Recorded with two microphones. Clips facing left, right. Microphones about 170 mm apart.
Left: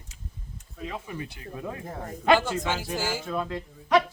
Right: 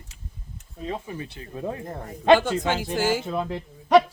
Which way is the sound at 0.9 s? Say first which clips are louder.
Right 4 dB; 30° right (ahead or behind).